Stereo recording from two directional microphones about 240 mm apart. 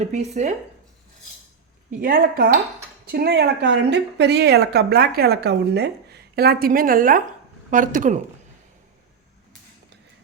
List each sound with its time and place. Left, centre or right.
0.0 s speech: right
1.9 s speech: right